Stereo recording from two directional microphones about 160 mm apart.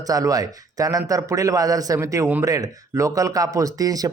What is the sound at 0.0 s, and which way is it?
A man's voice, 20° right (ahead or behind).